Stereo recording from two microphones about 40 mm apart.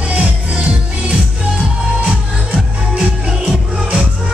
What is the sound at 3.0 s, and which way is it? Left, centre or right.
Music, centre.